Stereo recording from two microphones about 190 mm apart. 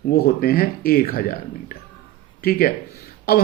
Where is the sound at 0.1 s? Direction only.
50° left (ahead or behind).